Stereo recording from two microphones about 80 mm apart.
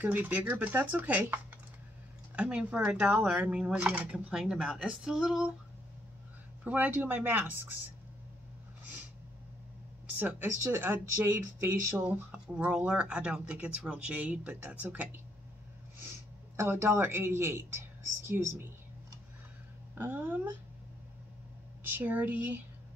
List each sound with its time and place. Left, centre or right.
0.0 s speech: right; by 5.5 s centre
6.6 s speech: right
10.1 s speech: right
12.1 s speech: centre
16.0 s speech: right
20.0 s speech: right
21.8 s speech: right